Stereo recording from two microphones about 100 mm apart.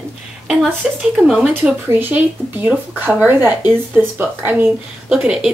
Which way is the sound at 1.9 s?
20° right (ahead or behind).